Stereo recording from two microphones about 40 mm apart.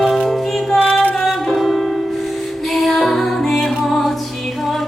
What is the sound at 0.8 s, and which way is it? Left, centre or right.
Music, left.